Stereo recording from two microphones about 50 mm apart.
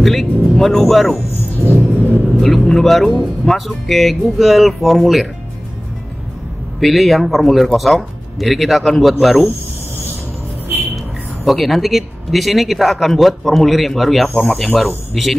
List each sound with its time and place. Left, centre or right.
0.0 s speech: centre
1.7 s music: right
2.4 s speech: centre
6.8 s speech: centre
11.4 s speech: centre